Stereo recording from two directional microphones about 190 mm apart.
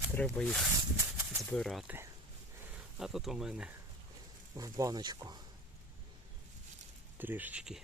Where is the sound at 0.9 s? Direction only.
15° right (ahead or behind).